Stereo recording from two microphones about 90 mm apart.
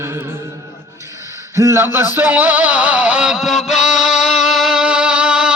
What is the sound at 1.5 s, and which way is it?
Speech, 30° right (ahead or behind).